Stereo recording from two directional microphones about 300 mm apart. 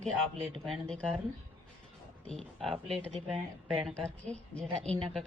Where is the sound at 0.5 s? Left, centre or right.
Centre.